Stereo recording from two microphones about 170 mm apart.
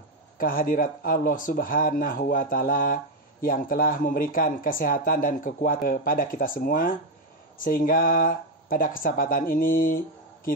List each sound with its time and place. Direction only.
0.4 s speech: 55° left (ahead or behind)